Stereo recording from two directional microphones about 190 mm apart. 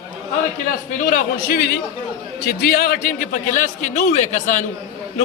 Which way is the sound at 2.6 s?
50° left (ahead or behind).